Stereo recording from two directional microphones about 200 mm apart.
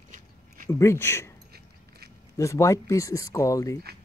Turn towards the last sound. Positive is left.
turn(degrees=15)  # may be behind; listen again after turning